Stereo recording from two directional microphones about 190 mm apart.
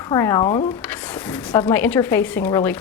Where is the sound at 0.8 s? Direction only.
10° left (ahead or behind).